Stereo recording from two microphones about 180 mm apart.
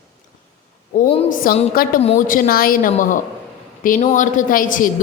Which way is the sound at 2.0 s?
35° left (ahead or behind).